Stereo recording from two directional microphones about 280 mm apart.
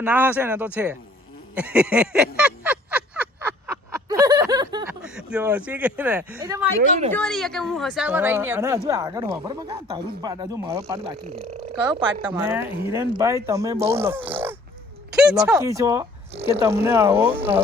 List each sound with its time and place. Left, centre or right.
0.0 s speech: centre
1.5 s a sound: centre
5.0 s speech: centre
7.1 s speech: centre
15.1 s a sound: centre
15.4 s speech: centre